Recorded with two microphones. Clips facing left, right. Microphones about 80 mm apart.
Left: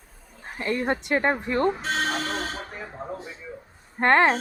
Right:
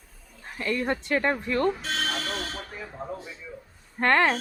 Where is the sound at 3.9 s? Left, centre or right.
Left.